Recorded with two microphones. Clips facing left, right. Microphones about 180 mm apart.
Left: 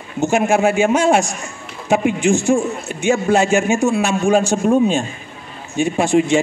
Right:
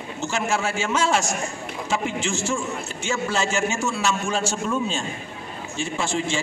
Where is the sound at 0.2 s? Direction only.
55° left (ahead or behind).